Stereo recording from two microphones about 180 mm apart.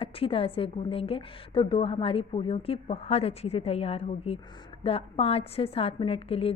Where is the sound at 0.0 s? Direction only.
30° left (ahead or behind).